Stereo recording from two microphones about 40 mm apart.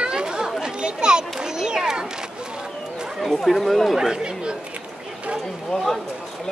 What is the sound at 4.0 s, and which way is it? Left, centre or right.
Speech, centre.